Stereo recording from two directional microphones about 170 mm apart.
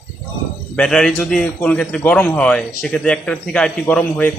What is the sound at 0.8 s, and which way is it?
A man's voice, 5° left (ahead or behind).